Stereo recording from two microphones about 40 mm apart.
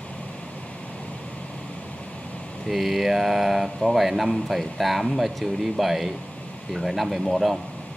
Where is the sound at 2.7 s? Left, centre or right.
Centre.